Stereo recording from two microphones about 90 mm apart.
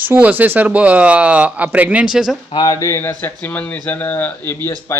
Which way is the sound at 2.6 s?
40° left (ahead or behind).